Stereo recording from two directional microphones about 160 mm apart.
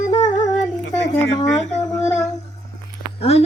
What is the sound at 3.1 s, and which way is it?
Speech, 40° left (ahead or behind).